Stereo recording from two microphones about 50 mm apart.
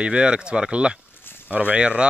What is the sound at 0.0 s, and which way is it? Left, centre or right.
Speech, centre.